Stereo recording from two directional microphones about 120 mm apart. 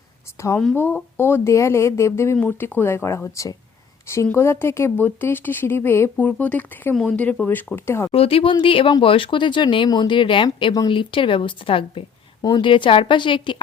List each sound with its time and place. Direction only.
0.8 s speech: 20° left (ahead or behind)
8.1 s a woman's voice: 55° left (ahead or behind)